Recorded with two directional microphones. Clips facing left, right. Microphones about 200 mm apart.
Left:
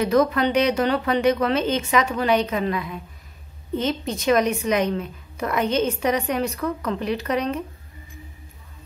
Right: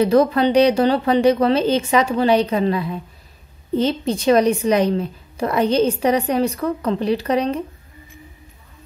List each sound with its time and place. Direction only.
0.0 s a woman's voice: 30° right (ahead or behind)